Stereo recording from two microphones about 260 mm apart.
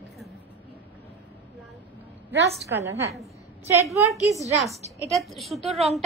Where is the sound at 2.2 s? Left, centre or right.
Centre.